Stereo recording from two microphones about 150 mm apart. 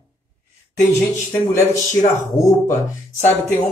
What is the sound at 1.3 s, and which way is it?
Speech, 20° left (ahead or behind).